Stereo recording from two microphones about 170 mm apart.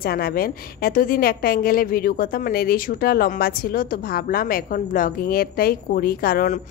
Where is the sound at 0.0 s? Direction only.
60° left (ahead or behind).